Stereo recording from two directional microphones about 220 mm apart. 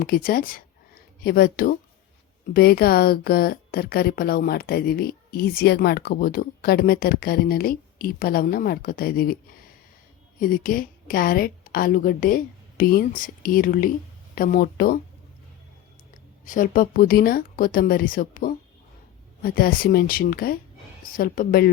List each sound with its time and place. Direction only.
0.0 s a woman's voice: 40° left (ahead or behind)
10.4 s a woman's voice: 40° left (ahead or behind)
16.5 s a woman's voice: 40° left (ahead or behind)